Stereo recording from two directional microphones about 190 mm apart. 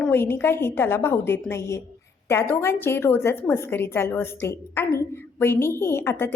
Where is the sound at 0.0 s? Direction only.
10° left (ahead or behind).